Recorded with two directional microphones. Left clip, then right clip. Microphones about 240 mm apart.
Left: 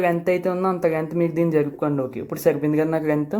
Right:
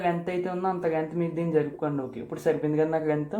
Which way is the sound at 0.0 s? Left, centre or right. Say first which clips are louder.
Left 7 dB; left.